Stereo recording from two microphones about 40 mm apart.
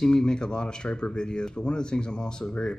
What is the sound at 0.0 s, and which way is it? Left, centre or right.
Speech, centre.